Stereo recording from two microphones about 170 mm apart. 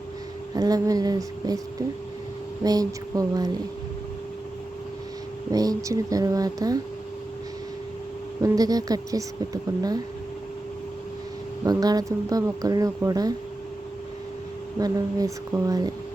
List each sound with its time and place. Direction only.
0.5 s speech: 20° right (ahead or behind)
2.6 s speech: 20° right (ahead or behind)
5.5 s speech: 20° right (ahead or behind)
8.4 s speech: 20° right (ahead or behind)
11.6 s speech: 20° right (ahead or behind)
14.8 s speech: 20° right (ahead or behind)